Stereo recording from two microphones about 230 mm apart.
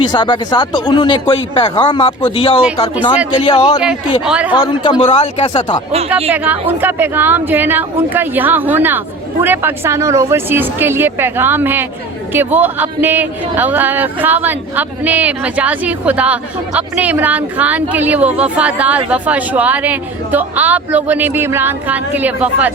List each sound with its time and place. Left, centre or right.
0.0 s speech: centre
4.2 s speech: centre
4.5 s speech: centre
6.3 s speech: centre